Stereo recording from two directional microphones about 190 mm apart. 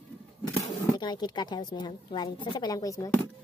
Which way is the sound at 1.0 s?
20° left (ahead or behind).